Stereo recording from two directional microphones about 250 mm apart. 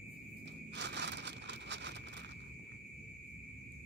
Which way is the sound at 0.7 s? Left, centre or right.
Right.